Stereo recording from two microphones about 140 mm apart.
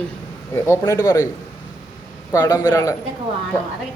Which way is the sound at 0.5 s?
20° left (ahead or behind).